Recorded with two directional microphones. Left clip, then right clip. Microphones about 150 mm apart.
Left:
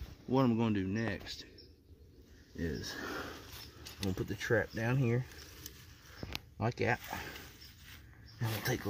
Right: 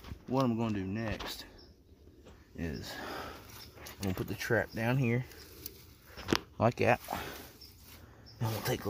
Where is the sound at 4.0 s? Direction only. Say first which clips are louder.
Right 1 dB; 20° right (ahead or behind).